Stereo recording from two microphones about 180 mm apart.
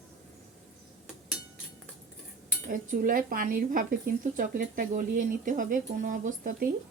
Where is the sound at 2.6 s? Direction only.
50° right (ahead or behind).